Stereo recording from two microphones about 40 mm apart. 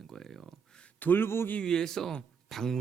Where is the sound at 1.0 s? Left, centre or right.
Left.